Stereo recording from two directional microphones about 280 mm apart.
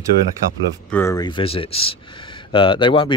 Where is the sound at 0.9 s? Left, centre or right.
Centre.